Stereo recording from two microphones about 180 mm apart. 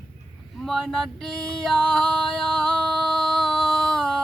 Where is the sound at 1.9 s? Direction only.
5° left (ahead or behind).